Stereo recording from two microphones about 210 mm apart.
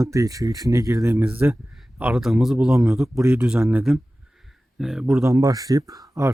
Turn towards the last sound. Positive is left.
turn(degrees=-15)  # may be behind; listen again after turning